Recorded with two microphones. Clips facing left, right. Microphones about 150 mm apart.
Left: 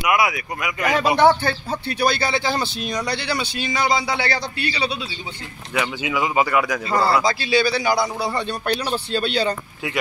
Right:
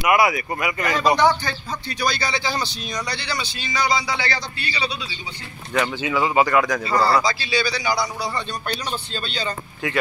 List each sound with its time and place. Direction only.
0.0 s speech: centre (ahead or behind)
1.1 s a man's voice: 60° left (ahead or behind)
5.8 s speech: 15° left (ahead or behind)
7.2 s a man's voice: 55° left (ahead or behind)